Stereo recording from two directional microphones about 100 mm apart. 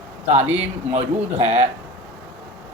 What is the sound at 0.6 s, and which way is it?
Speech, 90° right.